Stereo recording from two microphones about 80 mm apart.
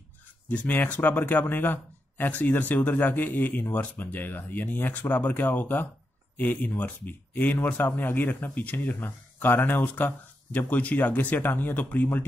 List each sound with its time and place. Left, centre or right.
0.5 s speech: left